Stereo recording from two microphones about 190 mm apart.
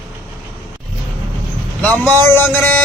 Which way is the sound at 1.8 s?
10° left (ahead or behind).